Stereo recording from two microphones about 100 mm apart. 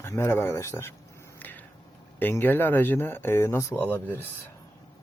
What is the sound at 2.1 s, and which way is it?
Speech, 20° left (ahead or behind).